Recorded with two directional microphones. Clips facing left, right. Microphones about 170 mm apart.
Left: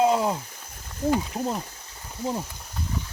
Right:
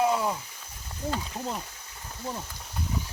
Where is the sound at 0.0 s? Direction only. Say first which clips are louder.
Left 4 dB; 25° left (ahead or behind).